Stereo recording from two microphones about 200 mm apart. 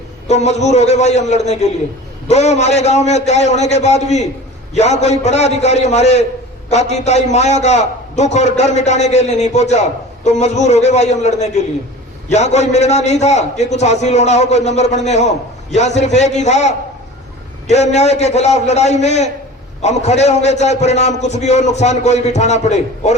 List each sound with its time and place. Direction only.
0.3 s a man's voice: 35° left (ahead or behind)